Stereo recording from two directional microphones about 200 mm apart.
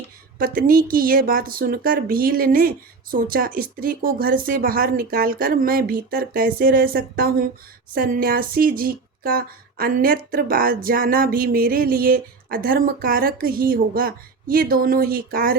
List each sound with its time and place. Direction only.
0.3 s speech: 45° right (ahead or behind)